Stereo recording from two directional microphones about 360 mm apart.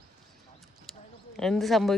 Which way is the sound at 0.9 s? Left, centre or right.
Centre.